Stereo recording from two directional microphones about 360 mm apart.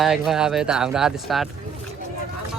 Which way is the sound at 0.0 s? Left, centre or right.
Centre.